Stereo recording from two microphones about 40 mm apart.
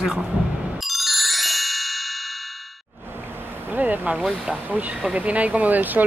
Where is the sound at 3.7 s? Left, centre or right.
Right.